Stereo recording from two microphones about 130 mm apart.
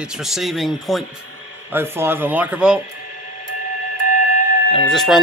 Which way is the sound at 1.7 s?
15° right (ahead or behind).